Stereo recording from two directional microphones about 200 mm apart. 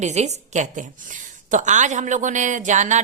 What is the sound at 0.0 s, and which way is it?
A woman's voice, 35° right (ahead or behind).